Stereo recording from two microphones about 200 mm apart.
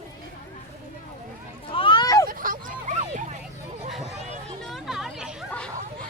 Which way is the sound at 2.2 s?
45° right (ahead or behind).